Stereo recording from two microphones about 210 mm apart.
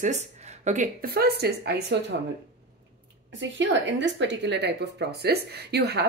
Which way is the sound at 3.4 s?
60° right (ahead or behind).